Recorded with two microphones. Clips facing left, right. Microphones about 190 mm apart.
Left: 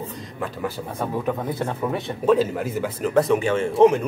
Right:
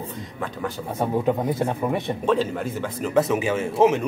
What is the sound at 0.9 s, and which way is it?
Speech, 20° right (ahead or behind).